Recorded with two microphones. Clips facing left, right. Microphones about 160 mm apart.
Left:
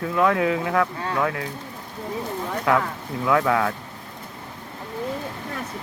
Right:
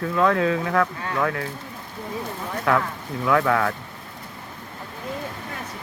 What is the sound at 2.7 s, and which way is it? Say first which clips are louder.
Speech: even; 15° left (ahead or behind).